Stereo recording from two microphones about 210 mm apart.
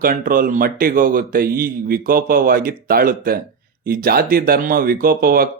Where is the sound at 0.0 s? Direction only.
40° right (ahead or behind).